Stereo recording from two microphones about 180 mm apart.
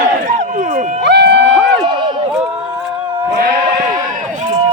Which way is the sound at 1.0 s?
70° right (ahead or behind).